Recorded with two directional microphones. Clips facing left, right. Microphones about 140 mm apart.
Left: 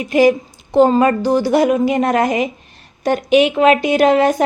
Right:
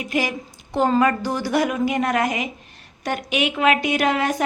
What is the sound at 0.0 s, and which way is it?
A woman's voice, 30° left (ahead or behind).